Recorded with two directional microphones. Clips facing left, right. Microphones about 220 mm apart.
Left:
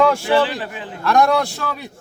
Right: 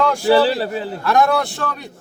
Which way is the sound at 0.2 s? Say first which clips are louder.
Right 4 dB; 35° right (ahead or behind).